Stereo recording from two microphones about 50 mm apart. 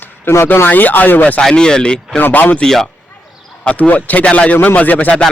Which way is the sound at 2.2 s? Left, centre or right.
Left.